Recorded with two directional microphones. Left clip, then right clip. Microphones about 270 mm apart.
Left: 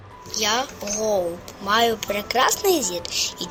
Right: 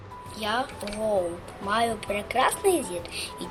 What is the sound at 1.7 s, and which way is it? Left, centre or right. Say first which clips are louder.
Speech: left 6 dB; left.